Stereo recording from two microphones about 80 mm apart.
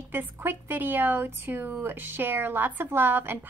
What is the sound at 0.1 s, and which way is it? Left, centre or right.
A woman's voice, right.